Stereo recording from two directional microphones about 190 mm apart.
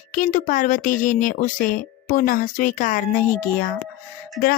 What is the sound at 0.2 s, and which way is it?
Speech, 45° left (ahead or behind).